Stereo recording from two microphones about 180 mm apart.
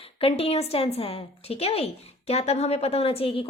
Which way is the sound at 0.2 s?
30° left (ahead or behind).